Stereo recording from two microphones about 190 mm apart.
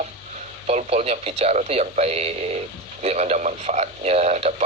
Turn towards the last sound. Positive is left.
turn(degrees=-35)  # may be behind; listen again after turning